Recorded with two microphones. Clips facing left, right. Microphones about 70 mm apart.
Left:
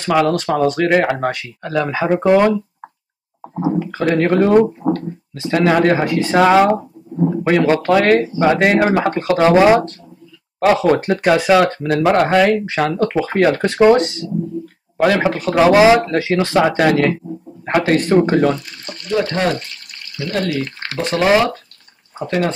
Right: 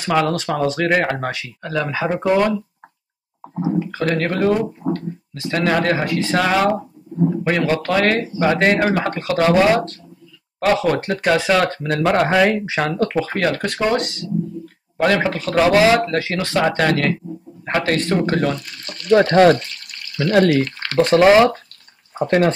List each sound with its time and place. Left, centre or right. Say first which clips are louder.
0.1 s speech: left 3 dB; centre
2.2 s speech: left 4 dB; left
3.9 s speech: left 5 dB; centre; by 5.0 s left
5.3 s speech: left 4 dB; centre
9.3 s speech: left 4 dB; centre
10.6 s speech: left 4 dB; centre
19.0 s speech: right 6 dB; right
20.9 s speech: right 7 dB; right
22.2 s speech: right 3 dB; right